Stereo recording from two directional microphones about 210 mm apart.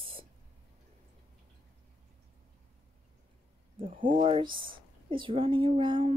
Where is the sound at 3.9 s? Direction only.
40° right (ahead or behind).